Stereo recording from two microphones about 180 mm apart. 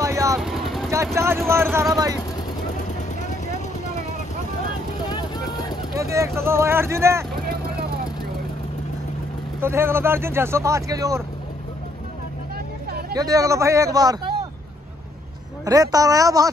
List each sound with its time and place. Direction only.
0.0 s vehicle: 15° right (ahead or behind)
0.4 s vehicle: centre (ahead or behind)
1.1 s speech: 15° right (ahead or behind)
5.9 s speech: 15° right (ahead or behind)
7.3 s vehicle: 55° right (ahead or behind)
9.6 s speech: 15° right (ahead or behind)
13.1 s a man's voice: 20° right (ahead or behind)
15.6 s a man's voice: 20° right (ahead or behind)